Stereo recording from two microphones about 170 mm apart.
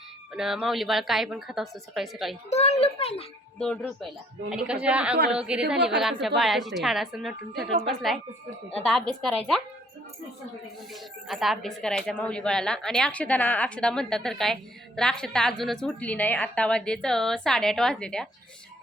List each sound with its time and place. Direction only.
0.3 s a woman's voice: 5° right (ahead or behind)
2.5 s a child's voice: 40° left (ahead or behind)
3.6 s a woman's voice: 5° left (ahead or behind)
11.3 s a woman's voice: centre (ahead or behind)